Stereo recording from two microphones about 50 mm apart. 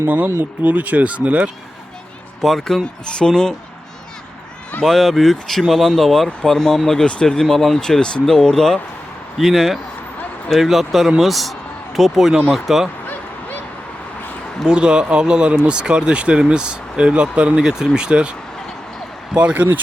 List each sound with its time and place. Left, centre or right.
0.6 s speech: right
2.4 s speech: centre
2.8 s speech: centre
4.8 s speech: centre
7.0 s speech: centre
9.4 s speech: centre
14.7 s speech: centre